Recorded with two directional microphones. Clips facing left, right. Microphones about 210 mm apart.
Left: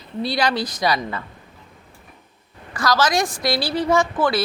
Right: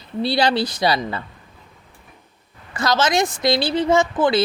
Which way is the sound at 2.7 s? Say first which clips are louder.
Right 1 dB; 25° right (ahead or behind).